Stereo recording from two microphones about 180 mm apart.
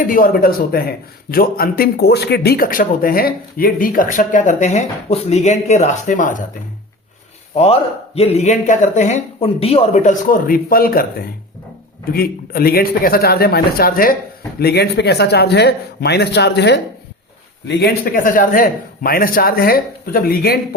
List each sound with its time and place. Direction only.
0.0 s a man's voice: 50° left (ahead or behind)
7.5 s a man's voice: 35° left (ahead or behind); by 14.2 s 55° left (ahead or behind)
14.6 s a man's voice: 65° left (ahead or behind)